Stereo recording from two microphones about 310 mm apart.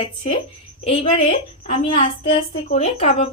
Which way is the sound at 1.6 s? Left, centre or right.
Left.